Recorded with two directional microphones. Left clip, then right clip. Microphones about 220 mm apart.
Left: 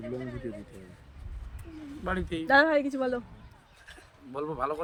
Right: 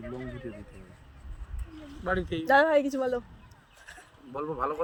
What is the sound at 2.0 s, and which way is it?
Speech, 15° left (ahead or behind).